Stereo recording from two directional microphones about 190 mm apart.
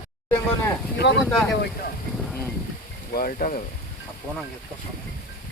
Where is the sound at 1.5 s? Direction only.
60° left (ahead or behind).